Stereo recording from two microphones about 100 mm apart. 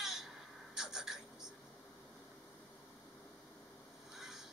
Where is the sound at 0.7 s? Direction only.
5° right (ahead or behind).